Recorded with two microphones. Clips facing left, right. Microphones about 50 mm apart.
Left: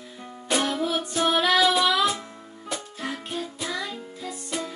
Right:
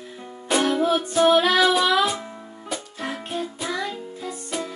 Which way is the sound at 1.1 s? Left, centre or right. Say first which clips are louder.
Right 8 dB; centre.